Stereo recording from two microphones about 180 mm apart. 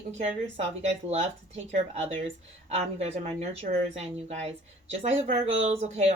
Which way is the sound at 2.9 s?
35° right (ahead or behind).